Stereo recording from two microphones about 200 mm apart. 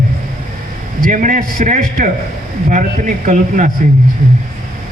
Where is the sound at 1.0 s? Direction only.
40° right (ahead or behind).